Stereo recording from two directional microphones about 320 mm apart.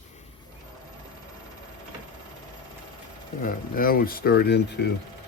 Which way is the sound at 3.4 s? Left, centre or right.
Left.